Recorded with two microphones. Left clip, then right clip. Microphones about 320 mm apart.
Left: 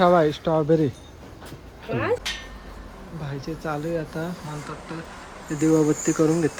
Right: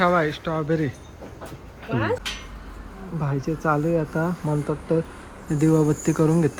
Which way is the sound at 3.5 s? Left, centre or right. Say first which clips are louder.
Right 4 dB; left.